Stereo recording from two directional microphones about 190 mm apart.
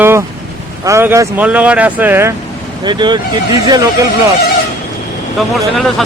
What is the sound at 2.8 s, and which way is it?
Speech, 25° right (ahead or behind).